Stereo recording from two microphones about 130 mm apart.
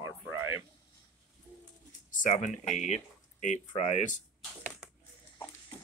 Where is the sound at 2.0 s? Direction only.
75° left (ahead or behind).